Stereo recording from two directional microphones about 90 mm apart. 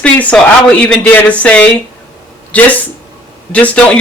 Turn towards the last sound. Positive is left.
turn(degrees=15)  # may be behind; listen again after turning